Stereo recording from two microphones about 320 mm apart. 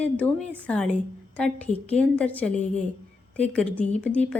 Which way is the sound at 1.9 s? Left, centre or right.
Centre.